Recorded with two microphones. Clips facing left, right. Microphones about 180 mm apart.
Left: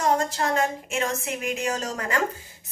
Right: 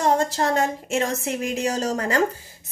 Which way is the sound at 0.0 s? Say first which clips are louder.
Right 3 dB; 35° right (ahead or behind).